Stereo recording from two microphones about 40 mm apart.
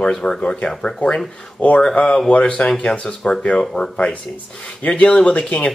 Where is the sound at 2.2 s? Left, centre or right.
Left.